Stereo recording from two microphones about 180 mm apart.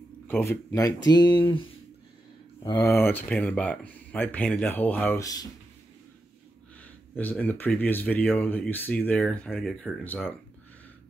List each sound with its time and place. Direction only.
0.3 s speech: 10° left (ahead or behind)
6.8 s speech: 10° left (ahead or behind)